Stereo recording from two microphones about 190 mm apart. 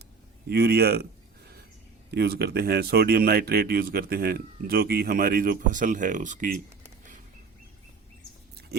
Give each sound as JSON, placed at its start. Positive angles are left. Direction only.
{"t": 0.4, "sound": "speech", "side_deg": -55}
{"t": 2.0, "sound": "speech", "side_deg": -55}